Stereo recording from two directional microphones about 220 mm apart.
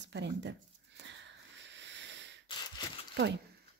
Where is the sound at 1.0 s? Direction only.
55° right (ahead or behind).